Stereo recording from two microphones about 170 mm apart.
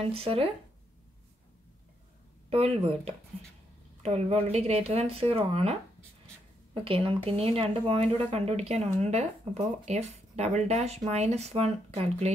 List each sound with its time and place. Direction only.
0.0 s speech: 35° right (ahead or behind)
2.5 s speech: 35° right (ahead or behind)